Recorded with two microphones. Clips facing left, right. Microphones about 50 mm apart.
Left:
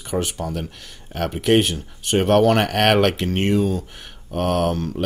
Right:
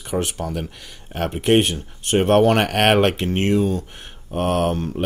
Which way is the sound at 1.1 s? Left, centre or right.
Centre.